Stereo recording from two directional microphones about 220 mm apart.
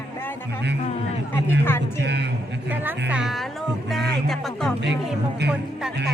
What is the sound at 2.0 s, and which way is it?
Speech, 50° right (ahead or behind).